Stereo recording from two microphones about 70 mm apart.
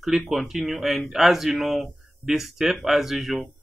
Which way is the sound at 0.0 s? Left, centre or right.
Centre.